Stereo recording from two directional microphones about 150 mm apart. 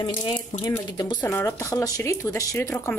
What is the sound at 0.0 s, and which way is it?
A woman's voice, 25° left (ahead or behind).